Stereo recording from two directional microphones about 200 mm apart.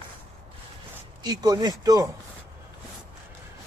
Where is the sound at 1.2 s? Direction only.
20° right (ahead or behind).